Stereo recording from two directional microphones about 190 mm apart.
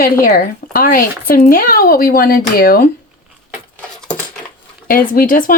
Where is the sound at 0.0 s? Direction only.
50° left (ahead or behind).